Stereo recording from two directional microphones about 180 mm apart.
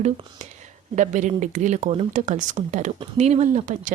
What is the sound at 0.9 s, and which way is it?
Speech, 40° right (ahead or behind).